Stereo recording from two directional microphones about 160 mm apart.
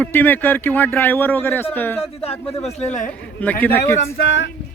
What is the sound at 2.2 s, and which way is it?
Speech, 40° left (ahead or behind).